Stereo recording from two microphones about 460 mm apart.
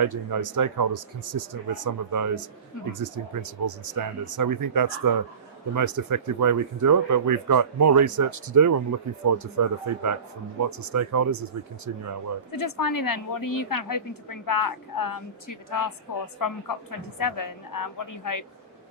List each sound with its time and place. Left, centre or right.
0.0 s speech: right
12.5 s a woman's voice: left